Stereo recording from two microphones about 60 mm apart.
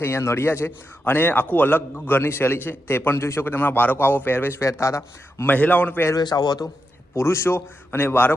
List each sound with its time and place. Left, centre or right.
0.0 s a man's voice: left
3.5 s a man's voice: left
4.6 s a man's voice: left
5.5 s a man's voice: left
6.1 s speech: left
7.2 s a man's voice: left